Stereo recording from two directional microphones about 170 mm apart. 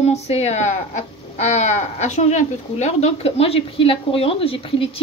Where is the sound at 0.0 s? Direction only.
40° left (ahead or behind).